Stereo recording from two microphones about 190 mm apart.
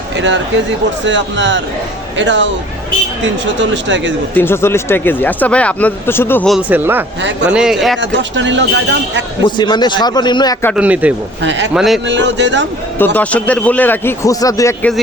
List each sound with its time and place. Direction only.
0.2 s speech: 70° right (ahead or behind)
4.4 s speech: 10° left (ahead or behind)
6.5 s a man's voice: 5° right (ahead or behind)
7.2 s speech: 70° right (ahead or behind)
7.5 s speech: 5° right (ahead or behind)
8.1 s speech: 70° right (ahead or behind)
9.4 s a man's voice: 25° left (ahead or behind)
10.8 s a man's voice: 5° right (ahead or behind)
11.4 s speech: 70° right (ahead or behind)
11.7 s speech: 5° right (ahead or behind)
12.0 s speech: 65° right (ahead or behind)
13.1 s speech: 10° left (ahead or behind)